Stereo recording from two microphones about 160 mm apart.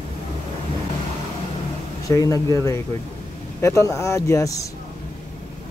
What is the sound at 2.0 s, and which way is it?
Speech, 20° left (ahead or behind).